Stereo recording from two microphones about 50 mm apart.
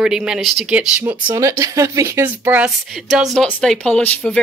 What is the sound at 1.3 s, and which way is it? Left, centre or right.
Speech, right.